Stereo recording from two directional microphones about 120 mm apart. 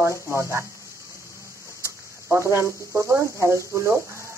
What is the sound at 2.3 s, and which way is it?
Speech, 25° right (ahead or behind).